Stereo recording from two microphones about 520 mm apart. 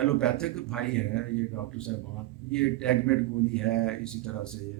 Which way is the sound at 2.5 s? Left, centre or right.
Centre.